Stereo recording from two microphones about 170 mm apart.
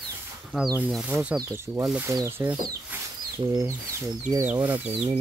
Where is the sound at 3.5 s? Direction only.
15° right (ahead or behind).